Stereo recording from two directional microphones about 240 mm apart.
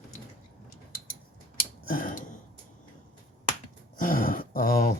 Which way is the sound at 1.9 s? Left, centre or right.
Left.